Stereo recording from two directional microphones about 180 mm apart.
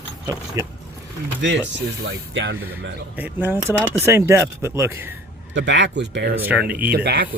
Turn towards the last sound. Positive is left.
turn(degrees=-60)  # may be behind; listen again after turning